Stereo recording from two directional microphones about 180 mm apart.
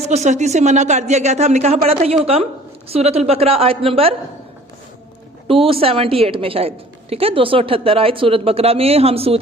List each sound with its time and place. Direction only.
0.0 s a woman's voice: 40° right (ahead or behind)
5.5 s a woman's voice: 30° right (ahead or behind)